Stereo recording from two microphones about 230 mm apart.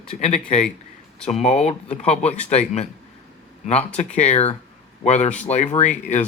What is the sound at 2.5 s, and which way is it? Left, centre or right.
Speech, left.